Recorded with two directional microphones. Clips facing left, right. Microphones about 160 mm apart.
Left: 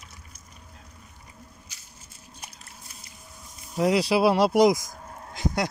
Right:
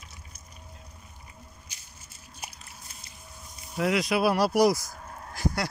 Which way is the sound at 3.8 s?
35° left (ahead or behind).